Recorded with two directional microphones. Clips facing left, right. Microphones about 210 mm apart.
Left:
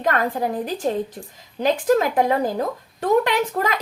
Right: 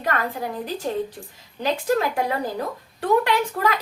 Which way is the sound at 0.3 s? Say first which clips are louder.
Left 4 dB; 45° left (ahead or behind).